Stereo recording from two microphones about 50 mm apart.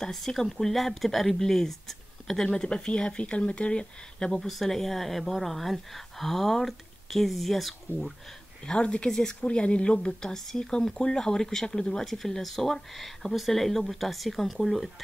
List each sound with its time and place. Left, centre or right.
0.0 s speech: centre
4.3 s speech: centre
8.6 s speech: left
10.2 s speech: centre